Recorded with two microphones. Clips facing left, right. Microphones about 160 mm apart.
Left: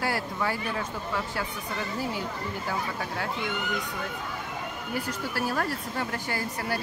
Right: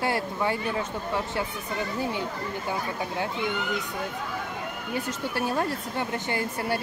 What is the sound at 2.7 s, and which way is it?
Speech, 20° right (ahead or behind).